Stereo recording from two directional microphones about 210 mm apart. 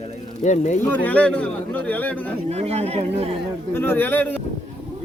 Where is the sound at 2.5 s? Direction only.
30° right (ahead or behind).